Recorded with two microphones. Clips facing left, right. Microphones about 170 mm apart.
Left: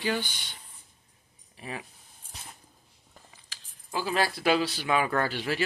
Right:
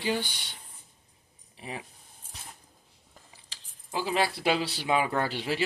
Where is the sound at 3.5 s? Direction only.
25° right (ahead or behind).